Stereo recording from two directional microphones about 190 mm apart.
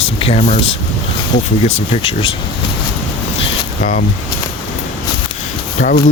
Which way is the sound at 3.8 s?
40° left (ahead or behind).